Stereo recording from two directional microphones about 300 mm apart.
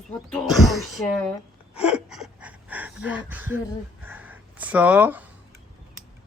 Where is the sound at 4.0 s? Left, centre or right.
Centre.